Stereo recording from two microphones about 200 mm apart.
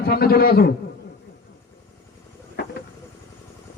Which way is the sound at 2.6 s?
55° left (ahead or behind).